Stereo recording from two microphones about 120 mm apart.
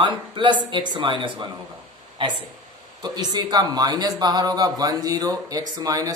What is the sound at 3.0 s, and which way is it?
A man's voice, 35° right (ahead or behind).